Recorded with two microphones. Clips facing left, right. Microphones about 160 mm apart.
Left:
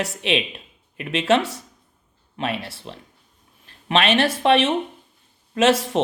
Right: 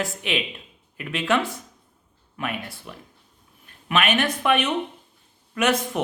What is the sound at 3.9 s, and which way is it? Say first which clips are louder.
Speech: left 3 dB; 30° left (ahead or behind).